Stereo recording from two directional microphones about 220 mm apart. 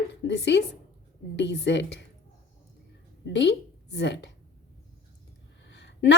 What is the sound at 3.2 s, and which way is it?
A woman's voice, 50° left (ahead or behind).